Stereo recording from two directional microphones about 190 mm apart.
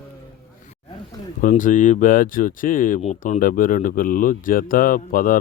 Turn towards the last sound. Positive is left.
turn(degrees=45)  # may be behind; listen again after turning